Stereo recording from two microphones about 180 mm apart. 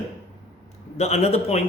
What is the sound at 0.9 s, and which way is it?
Speech, 35° left (ahead or behind).